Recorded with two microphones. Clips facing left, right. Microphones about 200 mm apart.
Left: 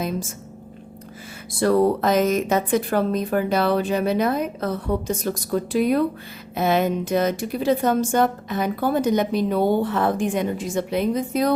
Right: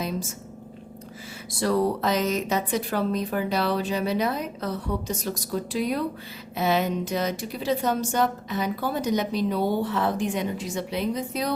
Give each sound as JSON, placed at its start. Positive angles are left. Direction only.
{"t": 1.5, "sound": "a woman's voice", "side_deg": 55}